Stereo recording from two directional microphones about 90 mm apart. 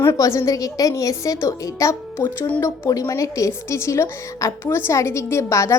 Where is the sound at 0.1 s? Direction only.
35° left (ahead or behind).